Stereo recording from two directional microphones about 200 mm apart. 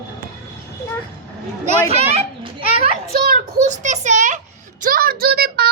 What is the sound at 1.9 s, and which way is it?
Children playing, 30° right (ahead or behind).